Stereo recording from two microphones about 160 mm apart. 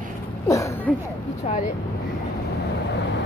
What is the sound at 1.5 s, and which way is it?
Speech, 40° left (ahead or behind).